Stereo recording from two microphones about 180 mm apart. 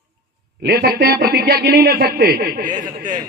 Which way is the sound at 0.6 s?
60° right (ahead or behind).